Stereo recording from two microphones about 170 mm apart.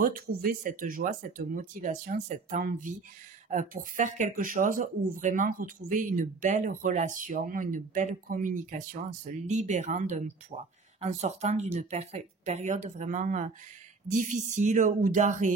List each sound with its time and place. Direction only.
0.0 s speech: 55° right (ahead or behind)